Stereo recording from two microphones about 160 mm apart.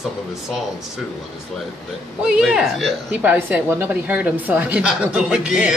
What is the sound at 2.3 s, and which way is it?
A woman's voice, 5° right (ahead or behind).